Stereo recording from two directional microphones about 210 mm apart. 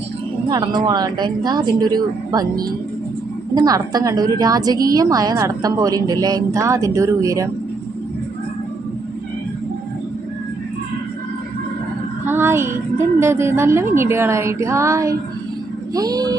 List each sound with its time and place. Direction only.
0.5 s a woman's voice: 20° right (ahead or behind)
3.5 s a woman's voice: 15° right (ahead or behind)
12.2 s a woman's voice: 10° right (ahead or behind)